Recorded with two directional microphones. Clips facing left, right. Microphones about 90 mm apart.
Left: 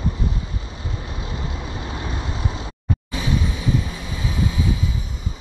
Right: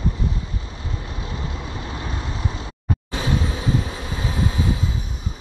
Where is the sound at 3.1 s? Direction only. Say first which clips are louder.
Right 1 dB; 40° right (ahead or behind).